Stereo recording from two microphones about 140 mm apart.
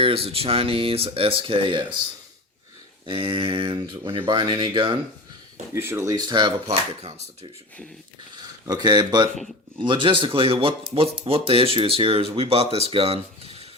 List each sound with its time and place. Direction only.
0.0 s speech: 45° right (ahead or behind)
3.1 s speech: 40° right (ahead or behind)
5.7 s speech: 20° right (ahead or behind)
6.7 s speech: 50° right (ahead or behind)
8.4 s speech: 30° right (ahead or behind); by 13.7 s 45° right (ahead or behind)